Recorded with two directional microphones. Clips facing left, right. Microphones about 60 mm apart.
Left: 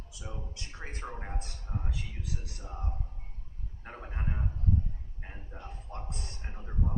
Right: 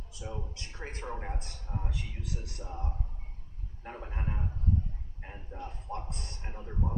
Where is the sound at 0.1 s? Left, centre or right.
Right.